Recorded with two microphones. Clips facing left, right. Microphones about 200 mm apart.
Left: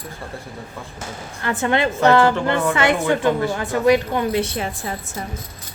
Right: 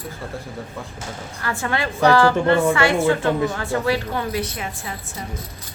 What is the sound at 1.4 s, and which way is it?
A woman's voice, 20° left (ahead or behind).